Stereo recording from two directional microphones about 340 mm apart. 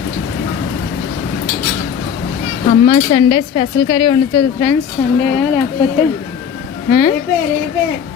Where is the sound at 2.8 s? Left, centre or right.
Centre.